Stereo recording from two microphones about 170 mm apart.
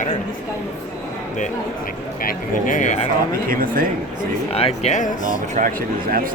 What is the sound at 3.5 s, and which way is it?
Speech, 55° right (ahead or behind).